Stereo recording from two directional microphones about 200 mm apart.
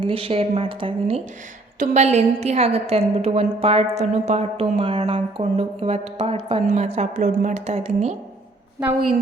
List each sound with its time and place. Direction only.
0.0 s a woman's voice: 25° right (ahead or behind)